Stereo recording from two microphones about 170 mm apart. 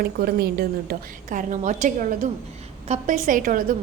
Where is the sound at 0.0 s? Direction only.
65° right (ahead or behind).